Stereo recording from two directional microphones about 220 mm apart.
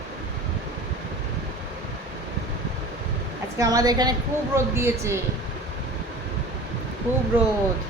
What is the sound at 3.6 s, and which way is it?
A woman's voice, 15° right (ahead or behind).